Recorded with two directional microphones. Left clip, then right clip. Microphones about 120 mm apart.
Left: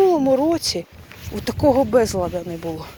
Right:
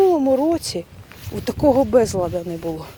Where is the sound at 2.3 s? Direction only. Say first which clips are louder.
Right 1 dB; 55° right (ahead or behind).